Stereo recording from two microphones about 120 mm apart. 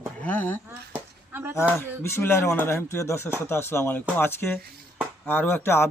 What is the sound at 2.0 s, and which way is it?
Speech, 20° left (ahead or behind).